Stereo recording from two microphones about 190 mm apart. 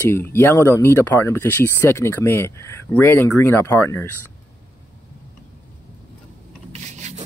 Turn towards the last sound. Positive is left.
turn(degrees=-35)  # may be behind; listen again after turning